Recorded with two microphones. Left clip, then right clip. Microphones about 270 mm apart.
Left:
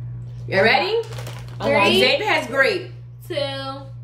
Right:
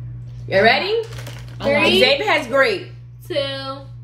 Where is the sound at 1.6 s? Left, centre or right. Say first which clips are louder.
Right 1 dB; centre.